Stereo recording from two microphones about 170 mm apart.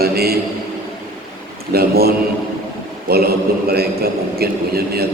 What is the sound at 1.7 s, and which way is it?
A man's voice, 65° right (ahead or behind).